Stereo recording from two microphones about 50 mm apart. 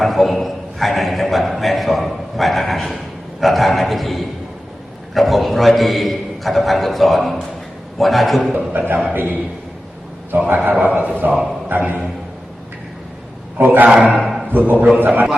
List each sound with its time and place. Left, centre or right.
0.0 s a man's voice: centre
8.5 s a man's voice: right
11.7 s a man's voice: right
13.6 s a man's voice: right
13.8 s a man's voice: right